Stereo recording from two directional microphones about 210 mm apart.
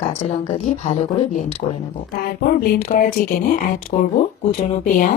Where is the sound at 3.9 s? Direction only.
35° left (ahead or behind).